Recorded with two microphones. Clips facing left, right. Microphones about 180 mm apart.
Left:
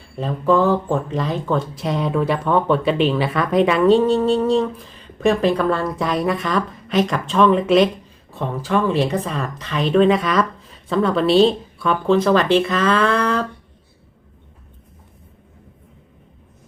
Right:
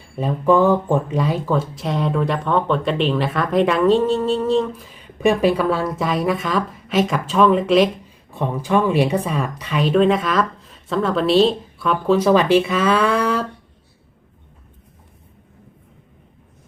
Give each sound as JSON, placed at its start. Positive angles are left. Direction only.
{"t": 0.2, "sound": "speech", "side_deg": -15}
{"t": 8.3, "sound": "a woman's voice", "side_deg": -15}